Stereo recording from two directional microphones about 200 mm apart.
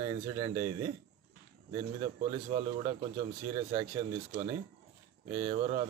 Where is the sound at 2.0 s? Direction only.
30° right (ahead or behind).